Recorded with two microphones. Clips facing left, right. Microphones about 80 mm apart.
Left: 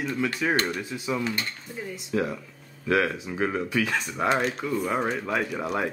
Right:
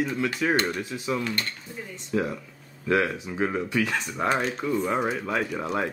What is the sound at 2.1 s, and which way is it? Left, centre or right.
Speech, centre.